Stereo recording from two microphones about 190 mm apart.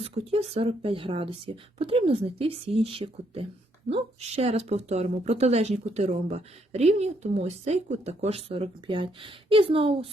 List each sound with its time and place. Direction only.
0.0 s speech: 30° right (ahead or behind)